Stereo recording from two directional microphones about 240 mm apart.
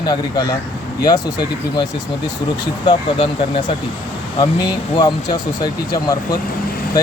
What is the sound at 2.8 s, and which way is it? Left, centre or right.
Speech, centre.